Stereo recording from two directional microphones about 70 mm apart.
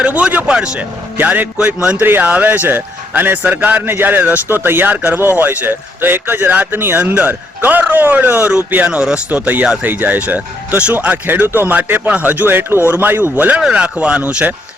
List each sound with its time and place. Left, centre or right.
0.0 s speech: centre
1.1 s a man's voice: right
7.0 s a man's voice: right
11.3 s a man's voice: right
13.6 s speech: centre